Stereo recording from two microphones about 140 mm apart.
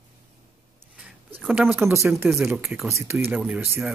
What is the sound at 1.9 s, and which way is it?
Speech, 15° right (ahead or behind).